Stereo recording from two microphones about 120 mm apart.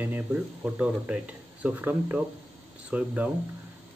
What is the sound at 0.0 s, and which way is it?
Speech, 15° right (ahead or behind).